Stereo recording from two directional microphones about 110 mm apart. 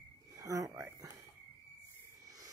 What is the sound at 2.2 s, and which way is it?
Cricket, 30° right (ahead or behind).